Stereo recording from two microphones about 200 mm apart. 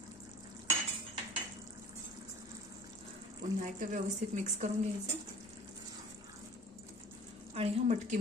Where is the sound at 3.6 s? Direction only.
40° right (ahead or behind).